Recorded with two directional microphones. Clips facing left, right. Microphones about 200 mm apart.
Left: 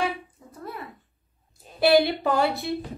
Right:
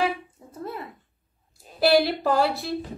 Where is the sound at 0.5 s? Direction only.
25° right (ahead or behind).